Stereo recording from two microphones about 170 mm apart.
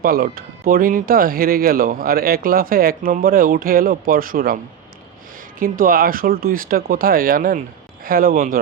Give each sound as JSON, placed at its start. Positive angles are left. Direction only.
{"t": 0.0, "sound": "speech", "side_deg": -60}